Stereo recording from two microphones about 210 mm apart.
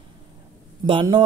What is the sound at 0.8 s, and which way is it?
Speech, 20° right (ahead or behind).